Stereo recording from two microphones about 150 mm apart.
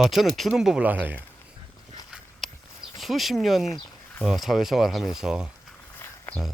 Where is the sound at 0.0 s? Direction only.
Centre (ahead or behind).